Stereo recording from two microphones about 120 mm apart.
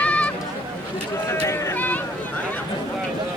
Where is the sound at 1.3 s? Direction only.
20° left (ahead or behind).